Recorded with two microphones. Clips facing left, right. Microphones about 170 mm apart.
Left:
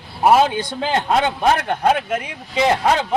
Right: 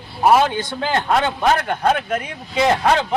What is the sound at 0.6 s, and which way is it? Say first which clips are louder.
A man's voice: left 1 dB; 20° left (ahead or behind).